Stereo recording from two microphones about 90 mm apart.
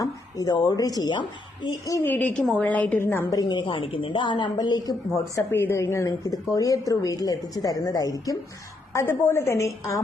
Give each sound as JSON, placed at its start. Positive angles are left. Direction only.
{"t": 0.0, "sound": "speech", "side_deg": 45}
{"t": 2.0, "sound": "a woman's voice", "side_deg": 20}
{"t": 2.3, "sound": "a woman's voice", "side_deg": 5}
{"t": 3.0, "sound": "a woman's voice", "side_deg": 30}
{"t": 3.5, "sound": "a woman's voice", "side_deg": 65}
{"t": 5.1, "sound": "speech", "side_deg": 35}
{"t": 5.5, "sound": "a woman's voice", "side_deg": 25}
{"t": 8.9, "sound": "speech", "side_deg": 30}